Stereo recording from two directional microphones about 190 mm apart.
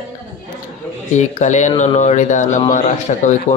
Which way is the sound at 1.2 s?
40° left (ahead or behind).